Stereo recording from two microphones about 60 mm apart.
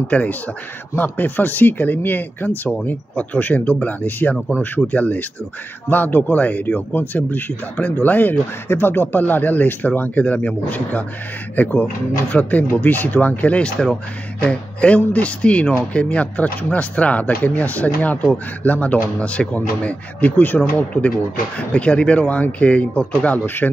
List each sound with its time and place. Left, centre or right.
0.1 s speech: left
23.4 s speech: left